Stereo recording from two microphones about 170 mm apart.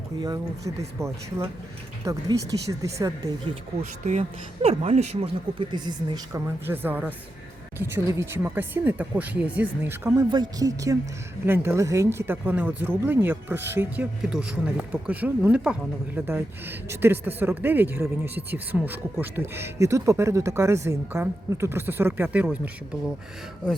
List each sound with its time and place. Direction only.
0.2 s speech: 25° right (ahead or behind)
4.0 s speech: 40° right (ahead or behind); by 6.4 s 25° right (ahead or behind)
6.7 s speech: 10° right (ahead or behind)
10.2 s speech: 25° right (ahead or behind); by 22.7 s 10° right (ahead or behind)